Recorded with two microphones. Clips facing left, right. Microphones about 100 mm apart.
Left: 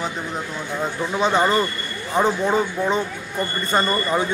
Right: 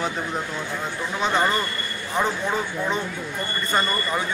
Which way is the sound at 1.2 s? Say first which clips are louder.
Left 4 dB; 15° left (ahead or behind).